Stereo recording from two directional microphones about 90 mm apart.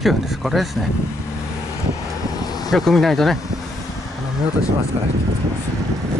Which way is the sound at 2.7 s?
Centre (ahead or behind).